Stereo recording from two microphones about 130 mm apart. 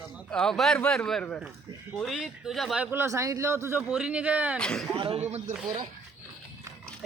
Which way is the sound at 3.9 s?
5° right (ahead or behind).